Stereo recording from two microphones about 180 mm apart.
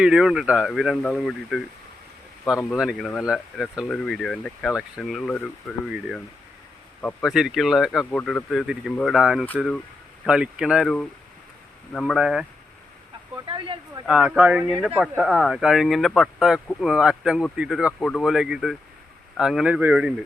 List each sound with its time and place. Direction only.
0.0 s speech: 5° right (ahead or behind)
13.5 s a sound: 30° right (ahead or behind)
14.1 s speech: 5° right (ahead or behind)